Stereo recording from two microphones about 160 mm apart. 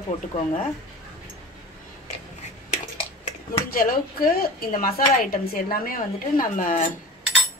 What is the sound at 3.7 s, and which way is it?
A woman's voice, 65° left (ahead or behind).